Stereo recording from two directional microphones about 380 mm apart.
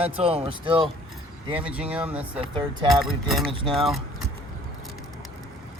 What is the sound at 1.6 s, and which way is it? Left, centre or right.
Speech, centre.